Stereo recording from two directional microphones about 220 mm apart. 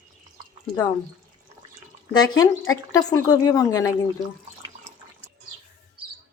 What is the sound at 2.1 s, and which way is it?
Speech, 20° left (ahead or behind).